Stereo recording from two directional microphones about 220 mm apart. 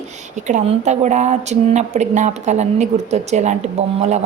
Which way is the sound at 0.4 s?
30° right (ahead or behind).